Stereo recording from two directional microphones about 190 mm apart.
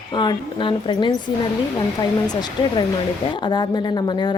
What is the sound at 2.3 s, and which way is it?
A woman's voice, 20° left (ahead or behind).